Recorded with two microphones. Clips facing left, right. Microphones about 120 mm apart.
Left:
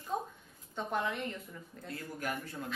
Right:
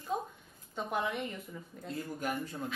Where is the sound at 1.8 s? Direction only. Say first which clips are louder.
Right 3 dB; 20° right (ahead or behind).